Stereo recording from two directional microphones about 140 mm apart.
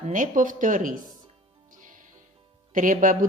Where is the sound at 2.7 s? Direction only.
70° right (ahead or behind).